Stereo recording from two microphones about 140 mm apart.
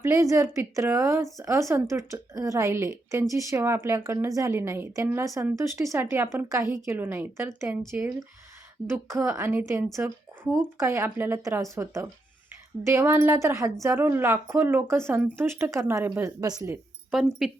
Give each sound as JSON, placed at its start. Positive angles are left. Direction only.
{"t": 0.0, "sound": "speech", "side_deg": -20}